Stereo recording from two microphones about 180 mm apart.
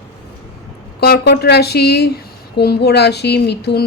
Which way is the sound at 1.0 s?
60° left (ahead or behind).